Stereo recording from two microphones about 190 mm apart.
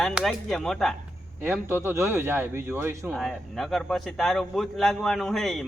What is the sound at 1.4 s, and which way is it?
Speech, 10° right (ahead or behind).